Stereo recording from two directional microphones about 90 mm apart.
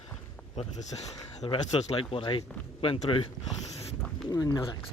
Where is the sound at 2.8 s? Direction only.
85° left.